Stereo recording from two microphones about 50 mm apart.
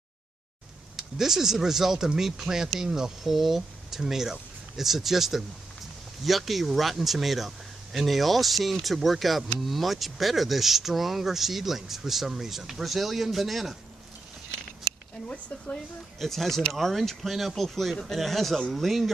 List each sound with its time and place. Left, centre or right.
0.9 s speech: centre
15.2 s speech: left
16.2 s speech: centre